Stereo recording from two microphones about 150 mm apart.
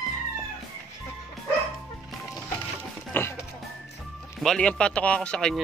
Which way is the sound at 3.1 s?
15° left (ahead or behind).